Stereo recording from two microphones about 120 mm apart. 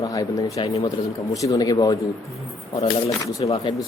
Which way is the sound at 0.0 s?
30° left (ahead or behind).